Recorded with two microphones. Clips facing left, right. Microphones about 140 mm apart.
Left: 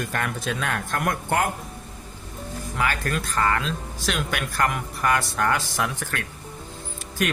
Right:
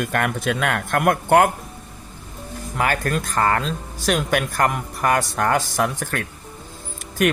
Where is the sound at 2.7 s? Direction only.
45° right (ahead or behind).